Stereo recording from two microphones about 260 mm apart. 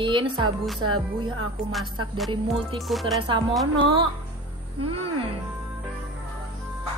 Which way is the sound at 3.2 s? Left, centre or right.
Centre.